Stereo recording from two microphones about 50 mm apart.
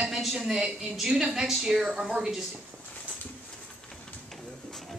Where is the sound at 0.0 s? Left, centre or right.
Centre.